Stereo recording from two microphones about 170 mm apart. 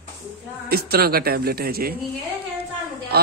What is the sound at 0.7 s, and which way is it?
Speech, 65° right (ahead or behind).